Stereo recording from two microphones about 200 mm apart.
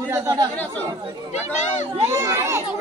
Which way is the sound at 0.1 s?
20° right (ahead or behind).